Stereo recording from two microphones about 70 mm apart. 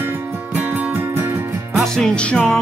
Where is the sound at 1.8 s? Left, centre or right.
Centre.